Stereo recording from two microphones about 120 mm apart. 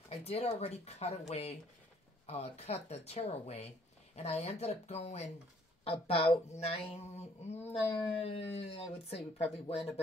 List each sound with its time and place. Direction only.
0.1 s speech: 60° left (ahead or behind)
5.9 s speech: 50° left (ahead or behind)
6.6 s speech: 60° left (ahead or behind)